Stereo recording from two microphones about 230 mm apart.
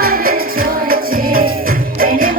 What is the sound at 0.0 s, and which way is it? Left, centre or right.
Music, right.